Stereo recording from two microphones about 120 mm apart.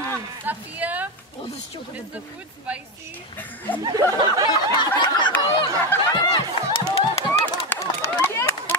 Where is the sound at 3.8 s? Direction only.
35° right (ahead or behind).